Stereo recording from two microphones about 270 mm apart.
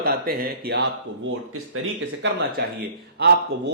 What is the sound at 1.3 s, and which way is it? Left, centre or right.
Speech, right.